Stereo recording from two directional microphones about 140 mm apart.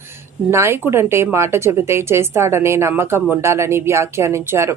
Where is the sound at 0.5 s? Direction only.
20° right (ahead or behind).